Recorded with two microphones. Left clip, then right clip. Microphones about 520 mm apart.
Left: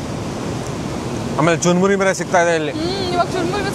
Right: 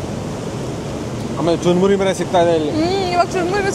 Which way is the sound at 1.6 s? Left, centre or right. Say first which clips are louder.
Even; left.